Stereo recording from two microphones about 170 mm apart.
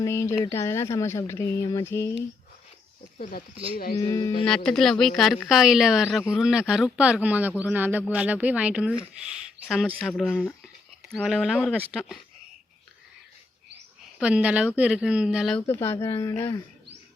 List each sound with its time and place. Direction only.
0.0 s speech: 15° left (ahead or behind)
4.0 s speech: 25° left (ahead or behind)
4.4 s speech: 5° left (ahead or behind)
14.2 s speech: 5° right (ahead or behind)
15.6 s speech: 15° left (ahead or behind)